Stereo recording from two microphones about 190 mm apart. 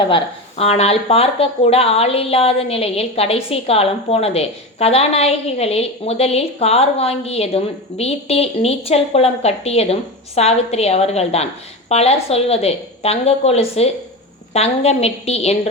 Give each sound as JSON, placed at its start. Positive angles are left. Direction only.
{"t": 0.1, "sound": "speech", "side_deg": 30}